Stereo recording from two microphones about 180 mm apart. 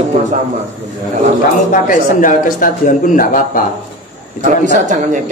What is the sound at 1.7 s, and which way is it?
Speech, 45° left (ahead or behind).